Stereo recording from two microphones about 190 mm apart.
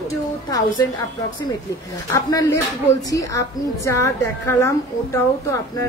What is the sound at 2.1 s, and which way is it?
Speech, 20° left (ahead or behind).